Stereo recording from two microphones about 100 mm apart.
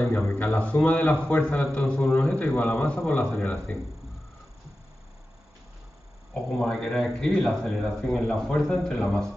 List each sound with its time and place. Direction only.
0.0 s a man's voice: 25° left (ahead or behind)
6.6 s a man's voice: 5° left (ahead or behind)